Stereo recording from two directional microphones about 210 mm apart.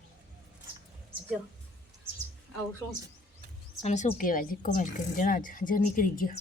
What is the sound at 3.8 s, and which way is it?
A woman's voice, 35° left (ahead or behind).